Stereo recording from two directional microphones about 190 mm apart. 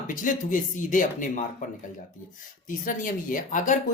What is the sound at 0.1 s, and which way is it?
Speech, 45° left (ahead or behind).